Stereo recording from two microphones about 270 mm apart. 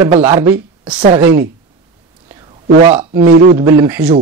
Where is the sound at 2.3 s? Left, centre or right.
Centre.